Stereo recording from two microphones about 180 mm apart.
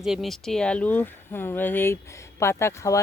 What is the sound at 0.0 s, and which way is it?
Speech, centre (ahead or behind).